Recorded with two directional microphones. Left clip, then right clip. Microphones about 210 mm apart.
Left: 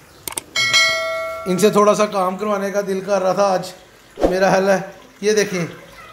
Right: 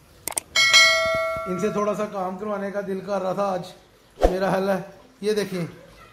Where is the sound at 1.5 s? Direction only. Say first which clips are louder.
Left 15 dB; 25° left (ahead or behind).